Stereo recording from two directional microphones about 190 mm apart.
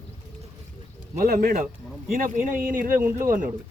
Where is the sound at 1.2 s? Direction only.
50° right (ahead or behind).